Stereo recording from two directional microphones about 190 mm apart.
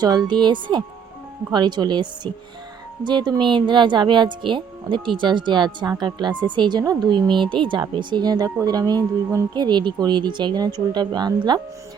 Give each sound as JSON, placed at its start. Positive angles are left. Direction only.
{"t": 0.0, "sound": "speech", "side_deg": -20}